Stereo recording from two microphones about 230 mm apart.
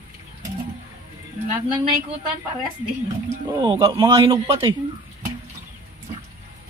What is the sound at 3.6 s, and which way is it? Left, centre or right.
Speech, centre.